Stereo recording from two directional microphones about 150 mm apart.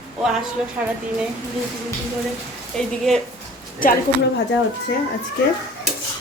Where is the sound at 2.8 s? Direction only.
5° left (ahead or behind).